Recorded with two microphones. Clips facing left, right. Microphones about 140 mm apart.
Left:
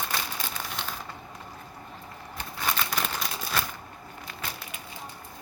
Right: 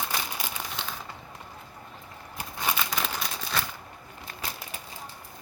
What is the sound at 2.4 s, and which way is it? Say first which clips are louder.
Crumpling: even; 5° right (ahead or behind).